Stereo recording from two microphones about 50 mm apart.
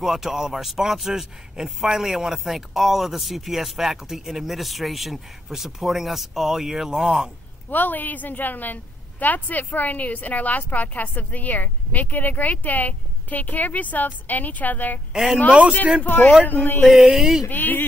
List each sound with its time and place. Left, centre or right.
0.0 s speech: centre
7.7 s a woman's voice: left
16.0 s a woman's voice: left
16.9 s speech: centre
17.5 s a woman's voice: left